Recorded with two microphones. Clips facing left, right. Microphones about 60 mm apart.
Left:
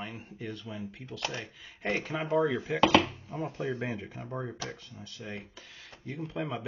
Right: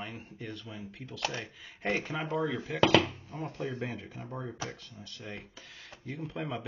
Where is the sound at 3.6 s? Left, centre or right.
Centre.